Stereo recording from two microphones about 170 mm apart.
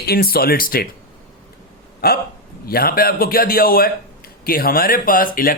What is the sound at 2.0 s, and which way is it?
A man's voice, 65° left (ahead or behind).